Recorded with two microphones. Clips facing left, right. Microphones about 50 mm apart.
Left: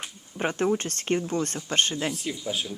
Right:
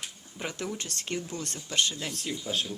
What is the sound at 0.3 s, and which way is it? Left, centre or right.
Speech, left.